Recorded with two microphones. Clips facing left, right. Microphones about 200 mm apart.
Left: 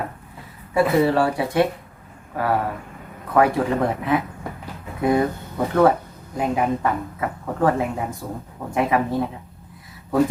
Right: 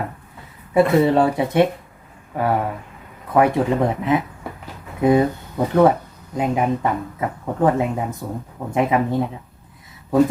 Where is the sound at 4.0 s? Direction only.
20° right (ahead or behind).